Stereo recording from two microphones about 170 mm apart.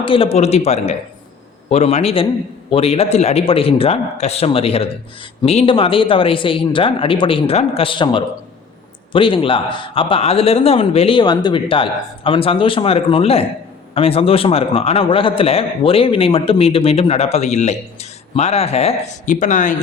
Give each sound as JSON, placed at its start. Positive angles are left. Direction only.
{"t": 0.0, "sound": "a man's voice", "side_deg": 30}